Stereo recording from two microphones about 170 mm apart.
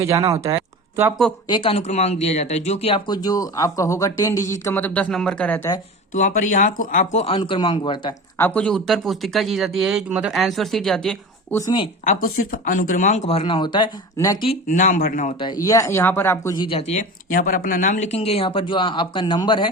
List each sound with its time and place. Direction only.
0.0 s speech: 20° right (ahead or behind)
0.5 s a sound: 10° right (ahead or behind)
1.5 s speech: 30° left (ahead or behind); by 5.7 s 10° left (ahead or behind)
6.1 s speech: 45° left (ahead or behind); by 8.1 s 30° left (ahead or behind)
8.4 s speech: 10° left (ahead or behind)
11.5 s speech: 20° left (ahead or behind)
12.0 s speech: 55° left (ahead or behind); by 14.3 s 25° left (ahead or behind)
14.7 s speech: 50° left (ahead or behind)
15.4 s speech: 25° left (ahead or behind)
16.6 s speech: 35° left (ahead or behind)